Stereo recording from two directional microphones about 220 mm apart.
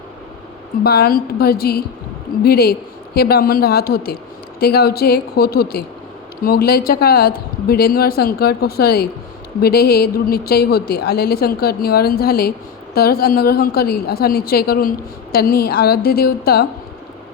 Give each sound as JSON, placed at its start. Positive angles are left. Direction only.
{"t": 0.9, "sound": "a woman's voice", "side_deg": 45}